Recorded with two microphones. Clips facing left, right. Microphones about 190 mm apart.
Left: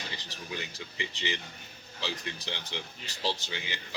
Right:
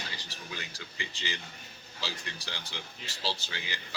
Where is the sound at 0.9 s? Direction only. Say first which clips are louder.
Left 4 dB; 20° left (ahead or behind).